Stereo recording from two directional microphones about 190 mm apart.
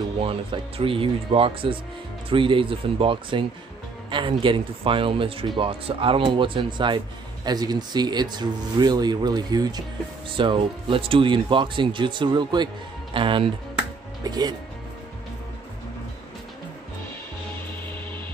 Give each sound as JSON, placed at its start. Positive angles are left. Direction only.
{"t": 0.2, "sound": "speech", "side_deg": -30}